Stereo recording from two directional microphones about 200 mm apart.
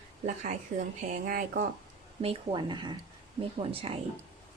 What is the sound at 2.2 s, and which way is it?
A woman's voice, 30° right (ahead or behind).